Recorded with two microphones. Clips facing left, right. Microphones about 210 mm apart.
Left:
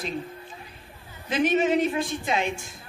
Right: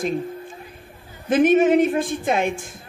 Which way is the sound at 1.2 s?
50° right (ahead or behind).